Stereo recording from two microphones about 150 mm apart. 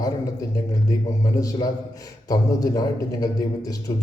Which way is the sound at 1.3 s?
20° left (ahead or behind).